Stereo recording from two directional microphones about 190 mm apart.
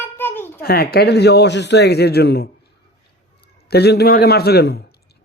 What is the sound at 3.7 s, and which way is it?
A man's voice, 60° left (ahead or behind).